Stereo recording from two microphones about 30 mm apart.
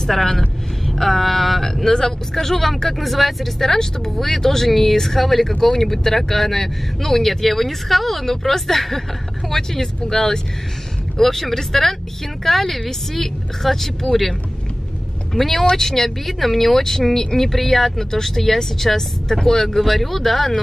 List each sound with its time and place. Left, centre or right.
0.0 s speech: centre
2.5 s speech: centre
3.6 s speech: centre
15.3 s speech: centre
19.8 s speech: centre